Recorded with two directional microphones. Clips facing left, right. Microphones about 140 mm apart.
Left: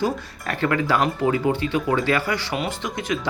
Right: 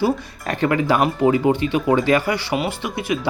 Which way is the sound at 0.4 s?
20° right (ahead or behind).